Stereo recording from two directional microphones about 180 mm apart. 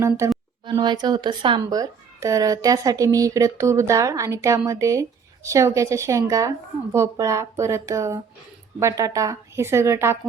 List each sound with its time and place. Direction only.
0.2 s a woman's voice: 15° right (ahead or behind)